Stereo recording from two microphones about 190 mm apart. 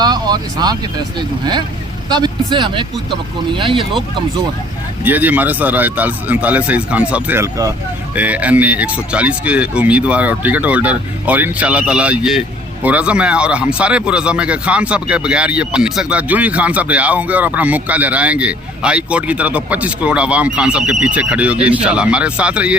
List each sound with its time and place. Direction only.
0.0 s speech: 20° right (ahead or behind)
2.0 s speech: 20° right (ahead or behind)
5.0 s speech: 10° right (ahead or behind)